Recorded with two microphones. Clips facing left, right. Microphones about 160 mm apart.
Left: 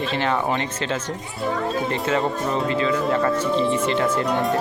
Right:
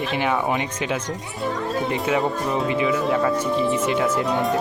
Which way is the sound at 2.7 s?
15° right (ahead or behind).